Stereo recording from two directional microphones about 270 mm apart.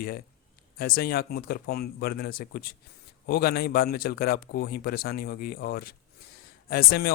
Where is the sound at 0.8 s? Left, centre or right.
Left.